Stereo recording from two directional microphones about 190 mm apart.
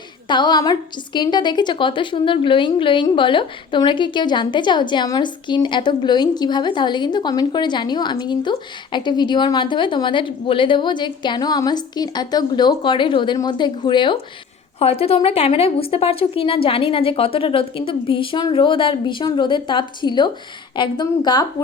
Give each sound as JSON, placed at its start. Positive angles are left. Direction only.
{"t": 0.3, "sound": "a woman's voice", "side_deg": 25}